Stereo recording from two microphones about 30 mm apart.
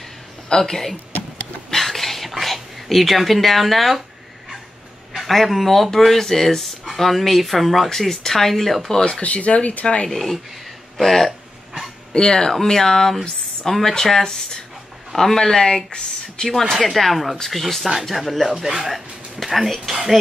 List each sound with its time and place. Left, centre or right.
0.5 s speech: centre
1.8 s whispering: centre
5.1 s a man's voice: centre
9.2 s speech: left
10.0 s speech: centre
12.1 s speech: left; by 13.9 s centre
14.2 s speech: left
16.7 s speech: centre